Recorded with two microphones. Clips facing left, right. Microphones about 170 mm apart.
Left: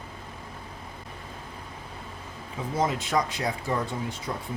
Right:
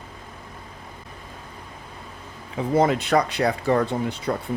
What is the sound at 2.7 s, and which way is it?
Speech, 65° right (ahead or behind).